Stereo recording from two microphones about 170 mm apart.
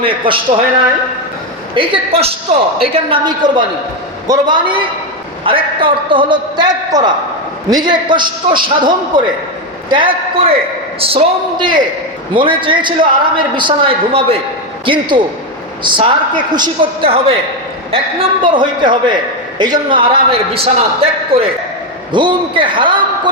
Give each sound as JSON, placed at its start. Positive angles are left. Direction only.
{"t": 0.0, "sound": "a man's voice", "side_deg": -30}
{"t": 1.7, "sound": "a man's voice", "side_deg": -30}